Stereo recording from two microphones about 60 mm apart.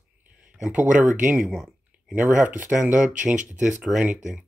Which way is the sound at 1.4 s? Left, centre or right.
Centre.